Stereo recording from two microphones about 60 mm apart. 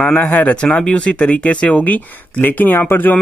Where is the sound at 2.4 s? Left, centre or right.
Left.